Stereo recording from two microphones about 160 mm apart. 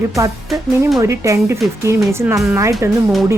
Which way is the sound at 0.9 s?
20° right (ahead or behind).